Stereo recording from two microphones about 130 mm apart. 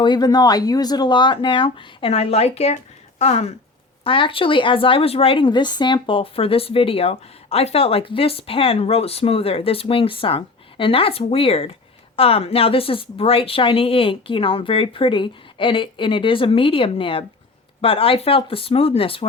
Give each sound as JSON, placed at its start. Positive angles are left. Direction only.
{"t": 0.0, "sound": "speech", "side_deg": 35}
{"t": 4.0, "sound": "speech", "side_deg": 40}